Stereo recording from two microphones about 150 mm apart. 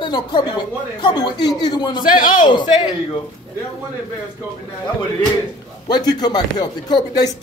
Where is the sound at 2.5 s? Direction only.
30° left (ahead or behind).